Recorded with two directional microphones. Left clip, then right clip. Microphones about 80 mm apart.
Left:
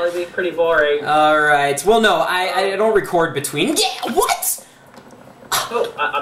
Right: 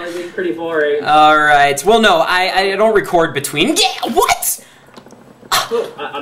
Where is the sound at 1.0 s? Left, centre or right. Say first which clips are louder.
Right 5 dB; centre.